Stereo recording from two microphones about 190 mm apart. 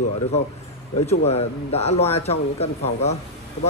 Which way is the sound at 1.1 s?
35° left (ahead or behind).